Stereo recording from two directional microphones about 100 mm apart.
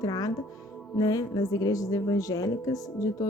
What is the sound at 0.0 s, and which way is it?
Speech, 40° left (ahead or behind).